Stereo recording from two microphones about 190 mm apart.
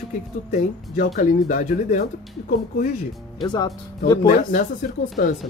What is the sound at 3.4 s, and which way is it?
Speech, 20° left (ahead or behind).